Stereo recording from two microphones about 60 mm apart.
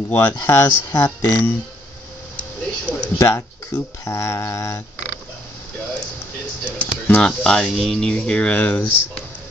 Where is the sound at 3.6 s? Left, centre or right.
Left.